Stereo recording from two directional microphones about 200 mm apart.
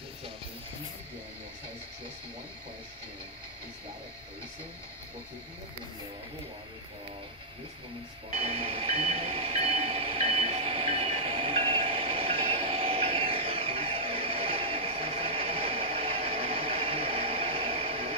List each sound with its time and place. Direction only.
8.3 s train: 30° right (ahead or behind)